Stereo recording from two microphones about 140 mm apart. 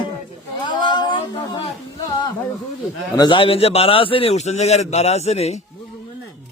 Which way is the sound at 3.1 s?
35° left (ahead or behind).